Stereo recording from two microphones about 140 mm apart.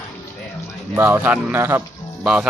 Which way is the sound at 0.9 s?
15° right (ahead or behind).